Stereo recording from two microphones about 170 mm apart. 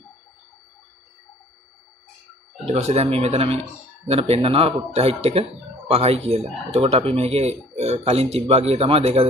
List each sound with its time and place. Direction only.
2.6 s speech: 40° right (ahead or behind)